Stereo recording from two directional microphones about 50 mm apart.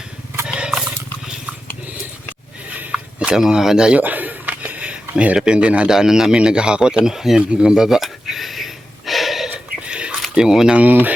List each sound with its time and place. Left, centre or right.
0.4 s wild animals: centre
0.8 s roaring cats: centre
2.9 s speech: centre
3.9 s a sound: right
5.4 s speech: centre
5.9 s a man's voice: centre
7.5 s a sound: centre
9.5 s a sound: right
10.3 s a man's voice: centre
10.8 s speech: right